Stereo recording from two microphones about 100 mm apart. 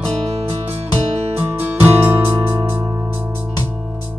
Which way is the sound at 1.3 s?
20° right (ahead or behind).